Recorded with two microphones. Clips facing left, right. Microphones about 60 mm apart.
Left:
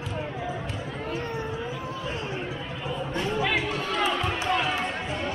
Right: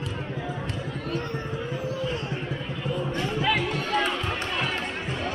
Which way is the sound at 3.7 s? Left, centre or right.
Right.